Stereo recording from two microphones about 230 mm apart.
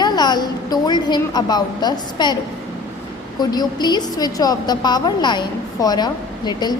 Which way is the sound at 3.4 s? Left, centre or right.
Centre.